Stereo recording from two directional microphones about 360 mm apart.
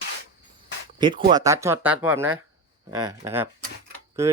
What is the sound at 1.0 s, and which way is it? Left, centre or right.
Speech, centre.